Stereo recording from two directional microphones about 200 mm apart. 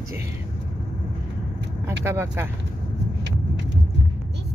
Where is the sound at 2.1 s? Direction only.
15° right (ahead or behind).